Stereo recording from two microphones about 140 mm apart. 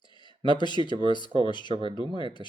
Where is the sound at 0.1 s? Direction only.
35° left (ahead or behind).